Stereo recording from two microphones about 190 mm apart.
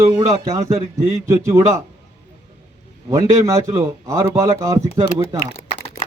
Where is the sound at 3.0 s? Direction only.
15° right (ahead or behind).